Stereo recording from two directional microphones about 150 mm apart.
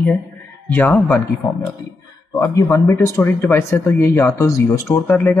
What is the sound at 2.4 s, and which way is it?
Speech, 20° left (ahead or behind).